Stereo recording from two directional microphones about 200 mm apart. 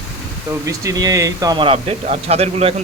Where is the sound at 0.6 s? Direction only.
15° right (ahead or behind).